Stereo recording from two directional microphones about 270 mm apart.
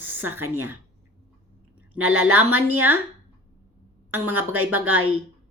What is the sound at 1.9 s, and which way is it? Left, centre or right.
Speech, right.